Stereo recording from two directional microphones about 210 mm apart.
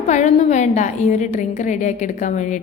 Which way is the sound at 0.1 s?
35° left (ahead or behind).